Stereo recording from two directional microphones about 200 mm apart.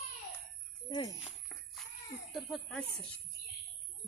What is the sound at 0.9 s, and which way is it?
Speech, 25° left (ahead or behind).